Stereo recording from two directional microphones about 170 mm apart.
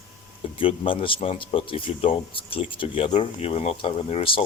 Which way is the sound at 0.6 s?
30° left (ahead or behind).